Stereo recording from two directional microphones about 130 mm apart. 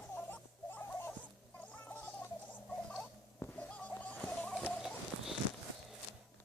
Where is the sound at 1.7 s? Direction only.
15° left (ahead or behind).